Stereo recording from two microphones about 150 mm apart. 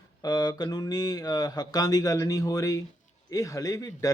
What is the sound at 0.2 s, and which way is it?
Speech, 25° left (ahead or behind).